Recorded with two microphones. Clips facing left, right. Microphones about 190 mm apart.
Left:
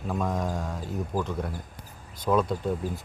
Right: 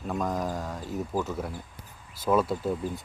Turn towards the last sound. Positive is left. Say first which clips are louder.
# even
turn(degrees=0)  # may be behind; listen again after turning